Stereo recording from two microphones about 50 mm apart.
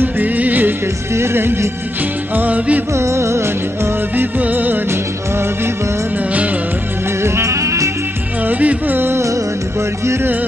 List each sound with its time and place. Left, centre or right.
0.0 s music: right
1.1 s speech: right
2.3 s music: right
2.9 s music: right
4.1 s music: right
4.8 s music: right
7.2 s music: right
8.5 s music: right
9.1 s music: right